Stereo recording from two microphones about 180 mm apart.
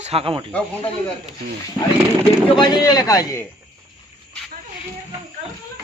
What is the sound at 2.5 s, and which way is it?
Speech, 25° left (ahead or behind).